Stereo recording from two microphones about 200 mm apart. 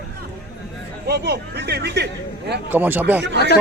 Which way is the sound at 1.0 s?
50° right (ahead or behind).